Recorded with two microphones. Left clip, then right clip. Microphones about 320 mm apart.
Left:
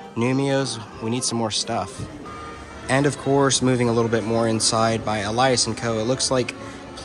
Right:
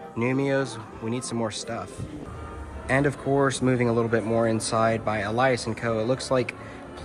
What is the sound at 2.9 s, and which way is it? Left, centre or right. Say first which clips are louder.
Speech: left 3 dB; centre.